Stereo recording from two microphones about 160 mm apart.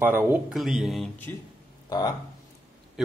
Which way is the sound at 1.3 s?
10° left (ahead or behind).